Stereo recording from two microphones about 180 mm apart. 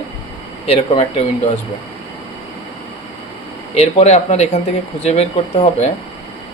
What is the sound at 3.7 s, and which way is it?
Speech, 35° left (ahead or behind).